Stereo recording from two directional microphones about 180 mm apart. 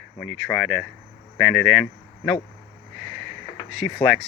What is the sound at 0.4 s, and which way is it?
Speech, 5° right (ahead or behind).